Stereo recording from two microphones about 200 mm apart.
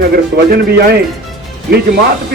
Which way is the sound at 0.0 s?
50° right (ahead or behind).